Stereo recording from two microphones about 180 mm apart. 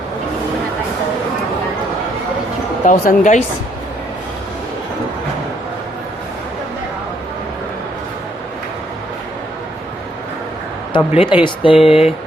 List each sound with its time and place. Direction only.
2.8 s speech: 45° left (ahead or behind)
10.9 s speech: 30° left (ahead or behind)
11.8 s speech: 5° right (ahead or behind)